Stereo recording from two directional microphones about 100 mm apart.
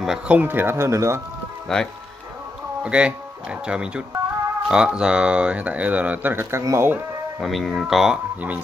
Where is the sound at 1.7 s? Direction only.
5° left (ahead or behind).